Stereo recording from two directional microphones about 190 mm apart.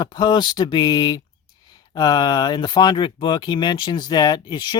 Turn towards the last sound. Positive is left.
turn(degrees=25)  # may be behind; listen again after turning